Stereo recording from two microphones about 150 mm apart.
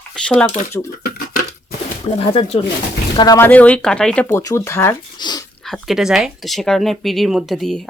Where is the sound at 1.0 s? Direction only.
85° left.